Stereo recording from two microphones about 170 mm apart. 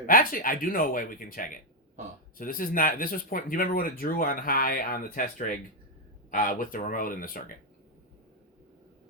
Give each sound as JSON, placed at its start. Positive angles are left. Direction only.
{"t": 0.0, "sound": "speech", "side_deg": 55}